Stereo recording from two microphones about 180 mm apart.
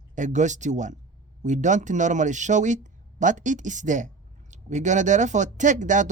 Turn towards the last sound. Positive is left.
turn(degrees=-45)  # may be behind; listen again after turning